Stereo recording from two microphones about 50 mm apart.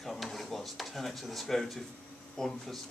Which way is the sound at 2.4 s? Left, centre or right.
Centre.